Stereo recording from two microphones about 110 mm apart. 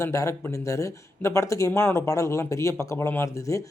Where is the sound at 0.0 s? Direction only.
30° left (ahead or behind).